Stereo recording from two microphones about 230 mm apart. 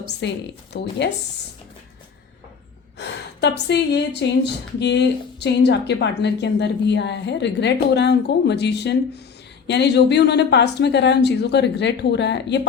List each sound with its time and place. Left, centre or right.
0.2 s a woman's voice: left
3.0 s a woman's voice: left